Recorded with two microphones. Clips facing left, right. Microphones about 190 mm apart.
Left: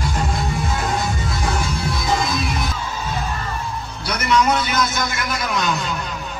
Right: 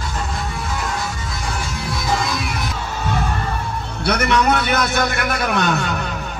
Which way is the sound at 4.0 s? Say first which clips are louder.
Right 1 dB; 60° right (ahead or behind).